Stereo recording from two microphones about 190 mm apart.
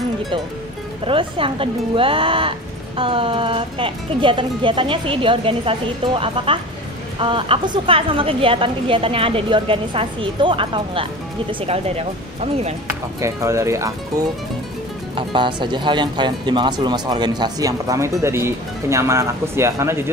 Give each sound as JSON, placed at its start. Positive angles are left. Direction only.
{"t": 1.0, "sound": "a woman's voice", "side_deg": -30}
{"t": 13.2, "sound": "a woman's voice", "side_deg": -15}